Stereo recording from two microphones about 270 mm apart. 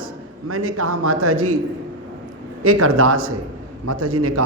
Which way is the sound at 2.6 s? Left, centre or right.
Right.